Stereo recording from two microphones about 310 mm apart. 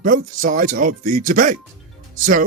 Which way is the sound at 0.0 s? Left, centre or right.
Right.